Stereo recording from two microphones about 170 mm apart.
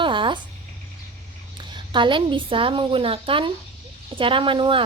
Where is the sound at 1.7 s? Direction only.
30° right (ahead or behind).